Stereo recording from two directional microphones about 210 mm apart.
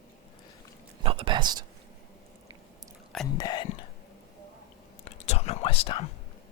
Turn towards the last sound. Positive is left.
turn(degrees=25)  # may be behind; listen again after turning